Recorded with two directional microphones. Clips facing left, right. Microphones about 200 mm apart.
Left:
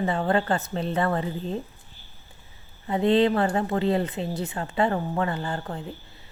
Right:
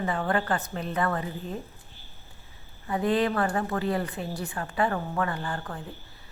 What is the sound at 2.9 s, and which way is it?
Speech, 25° left (ahead or behind).